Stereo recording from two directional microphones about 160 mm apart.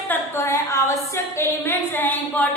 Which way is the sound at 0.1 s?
15° left (ahead or behind).